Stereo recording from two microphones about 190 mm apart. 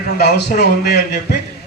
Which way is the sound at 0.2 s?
60° left (ahead or behind).